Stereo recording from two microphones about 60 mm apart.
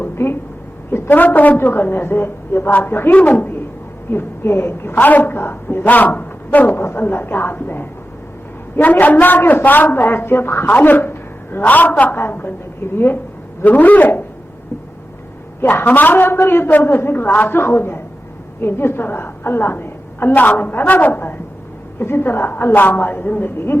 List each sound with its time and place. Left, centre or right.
0.0 s a sound: left
1.1 s a woman's voice: left
6.7 s a woman's voice: left
15.6 s a woman's voice: left